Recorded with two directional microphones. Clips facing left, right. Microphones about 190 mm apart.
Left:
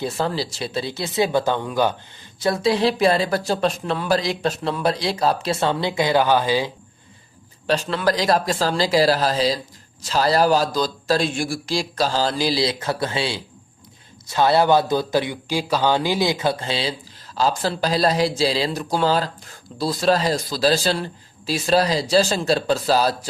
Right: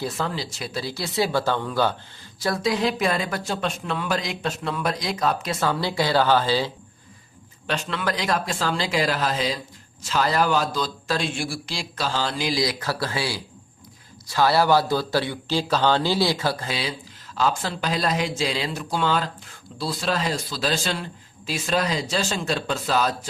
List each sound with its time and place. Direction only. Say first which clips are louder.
0.0 s a man's voice: left 4 dB; 30° left (ahead or behind); by 2.0 s 15° left (ahead or behind)
2.4 s speech: left 4 dB; 25° left (ahead or behind)
7.7 s a man's voice: left 6 dB; 35° left (ahead or behind)